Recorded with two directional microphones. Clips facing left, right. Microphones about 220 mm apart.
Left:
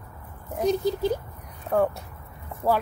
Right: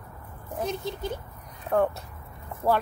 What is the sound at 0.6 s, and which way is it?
Speech, 35° left (ahead or behind).